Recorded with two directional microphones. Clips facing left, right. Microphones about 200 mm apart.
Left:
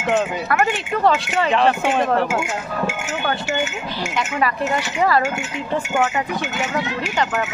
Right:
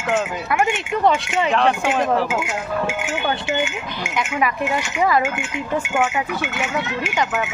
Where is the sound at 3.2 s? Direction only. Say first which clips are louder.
Left 1 dB; 15° right (ahead or behind).